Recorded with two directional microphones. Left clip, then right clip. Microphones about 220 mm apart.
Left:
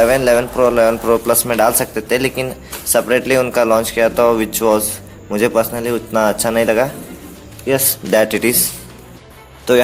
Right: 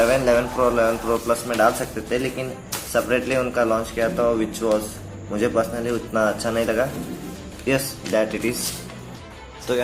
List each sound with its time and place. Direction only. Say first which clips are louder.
0.0 s speech: left 6 dB; 45° left (ahead or behind)
7.7 s speech: left 5 dB; 25° left (ahead or behind)
8.1 s speech: left 8 dB; 50° left (ahead or behind)
9.7 s speech: left 11 dB; 30° left (ahead or behind)